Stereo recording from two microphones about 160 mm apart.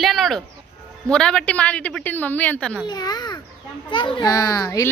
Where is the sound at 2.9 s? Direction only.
25° left (ahead or behind).